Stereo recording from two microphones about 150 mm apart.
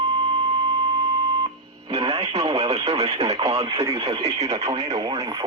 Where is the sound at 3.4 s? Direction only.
25° right (ahead or behind).